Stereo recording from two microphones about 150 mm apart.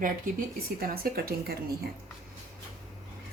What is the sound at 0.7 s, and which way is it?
Speech, 90° right.